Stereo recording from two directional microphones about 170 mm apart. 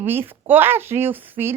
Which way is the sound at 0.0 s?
10° right (ahead or behind).